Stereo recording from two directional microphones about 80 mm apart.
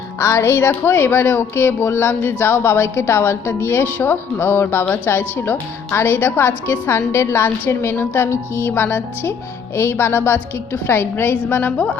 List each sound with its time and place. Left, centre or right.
0.2 s speech: left